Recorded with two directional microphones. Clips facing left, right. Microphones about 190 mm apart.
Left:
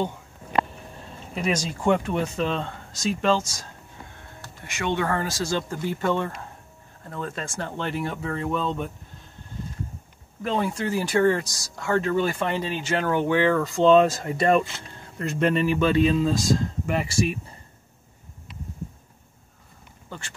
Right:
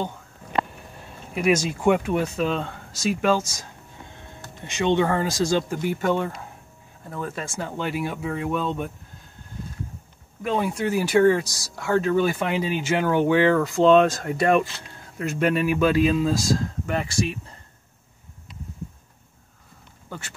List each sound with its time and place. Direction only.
1.3 s speech: 10° right (ahead or behind)
4.4 s speech: 20° right (ahead or behind)
10.4 s speech: 5° right (ahead or behind)